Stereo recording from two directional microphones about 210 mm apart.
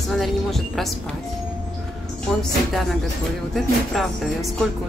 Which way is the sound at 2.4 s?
Centre (ahead or behind).